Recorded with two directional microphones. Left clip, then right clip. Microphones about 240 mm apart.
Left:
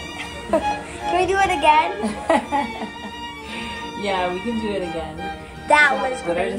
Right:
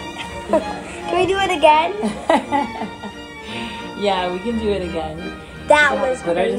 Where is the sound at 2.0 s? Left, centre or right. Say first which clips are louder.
Right 2 dB; right.